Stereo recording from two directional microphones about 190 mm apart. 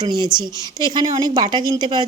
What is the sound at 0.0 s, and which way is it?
Speech, 20° right (ahead or behind).